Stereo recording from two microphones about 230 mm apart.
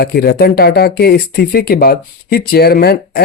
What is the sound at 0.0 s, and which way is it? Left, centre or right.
Speech, left.